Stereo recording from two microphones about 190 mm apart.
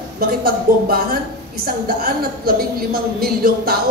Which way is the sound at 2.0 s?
50° right (ahead or behind).